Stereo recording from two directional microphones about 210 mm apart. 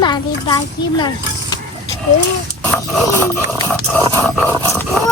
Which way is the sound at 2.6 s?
5° left (ahead or behind).